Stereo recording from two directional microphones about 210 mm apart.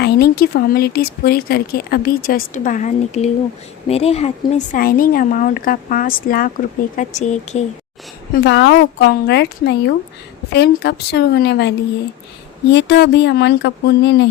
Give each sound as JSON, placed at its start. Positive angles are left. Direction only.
{"t": 0.0, "sound": "speech", "side_deg": 50}
{"t": 8.4, "sound": "a woman's voice", "side_deg": 55}
{"t": 12.7, "sound": "a woman's voice", "side_deg": 55}